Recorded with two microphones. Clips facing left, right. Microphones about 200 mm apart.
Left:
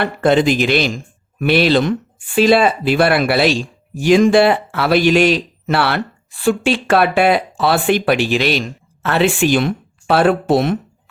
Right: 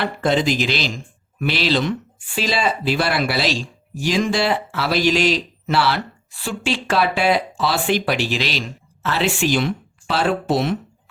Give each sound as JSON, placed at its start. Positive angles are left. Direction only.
{"t": 0.0, "sound": "speech", "side_deg": 55}